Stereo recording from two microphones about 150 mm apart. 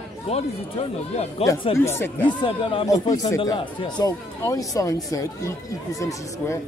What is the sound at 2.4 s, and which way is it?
Speech, 35° left (ahead or behind).